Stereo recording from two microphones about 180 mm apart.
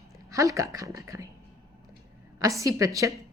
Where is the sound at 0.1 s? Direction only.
20° right (ahead or behind).